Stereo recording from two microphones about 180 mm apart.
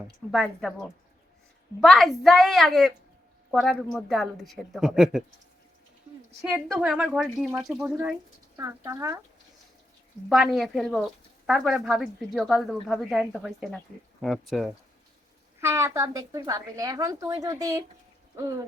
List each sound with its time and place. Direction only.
0.3 s speech: centre (ahead or behind)
6.4 s speech: 5° right (ahead or behind)
10.2 s speech: centre (ahead or behind)
15.6 s a woman's voice: 15° right (ahead or behind)